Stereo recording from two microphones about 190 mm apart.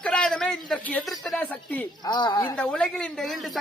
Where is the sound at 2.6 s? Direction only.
5° left (ahead or behind).